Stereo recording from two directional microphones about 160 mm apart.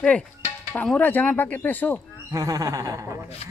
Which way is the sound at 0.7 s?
10° left (ahead or behind).